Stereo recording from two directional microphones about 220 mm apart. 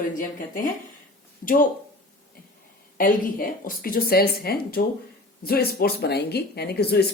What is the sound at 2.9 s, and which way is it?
Speech, 40° left (ahead or behind).